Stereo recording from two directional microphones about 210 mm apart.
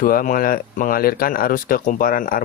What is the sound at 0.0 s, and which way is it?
Speech, 40° left (ahead or behind).